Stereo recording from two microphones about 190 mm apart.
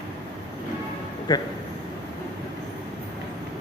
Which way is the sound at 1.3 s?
25° left (ahead or behind).